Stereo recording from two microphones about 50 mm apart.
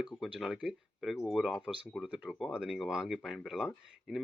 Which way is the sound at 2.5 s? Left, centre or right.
Centre.